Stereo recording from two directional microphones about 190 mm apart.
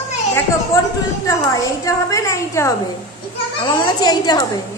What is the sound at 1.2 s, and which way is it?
A woman's voice, 15° left (ahead or behind).